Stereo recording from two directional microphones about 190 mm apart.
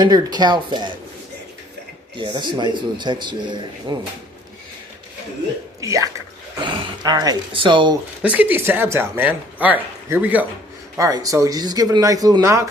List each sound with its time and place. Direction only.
0.0 s speech: 20° right (ahead or behind)
2.1 s speech: 25° right (ahead or behind)
5.8 s speech: 15° right (ahead or behind)
8.2 s speech: 10° right (ahead or behind)